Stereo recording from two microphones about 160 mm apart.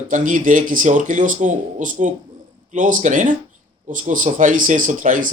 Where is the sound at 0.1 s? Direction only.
55° right (ahead or behind).